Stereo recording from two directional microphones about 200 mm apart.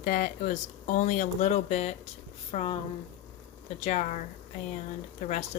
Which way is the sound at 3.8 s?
35° left (ahead or behind).